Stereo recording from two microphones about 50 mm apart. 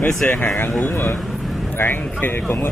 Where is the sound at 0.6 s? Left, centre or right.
Left.